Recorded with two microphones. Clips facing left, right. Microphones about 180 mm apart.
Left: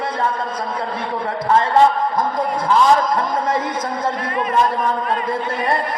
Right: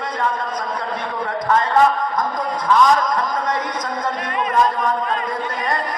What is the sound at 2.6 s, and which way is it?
Speech, 30° left (ahead or behind).